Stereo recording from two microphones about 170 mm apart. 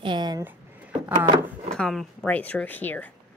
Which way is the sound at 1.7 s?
5° left (ahead or behind).